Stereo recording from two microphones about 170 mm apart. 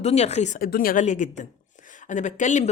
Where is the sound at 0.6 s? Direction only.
60° left (ahead or behind).